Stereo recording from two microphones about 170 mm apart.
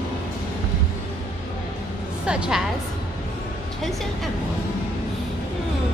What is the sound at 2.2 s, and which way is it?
Speech, 5° right (ahead or behind).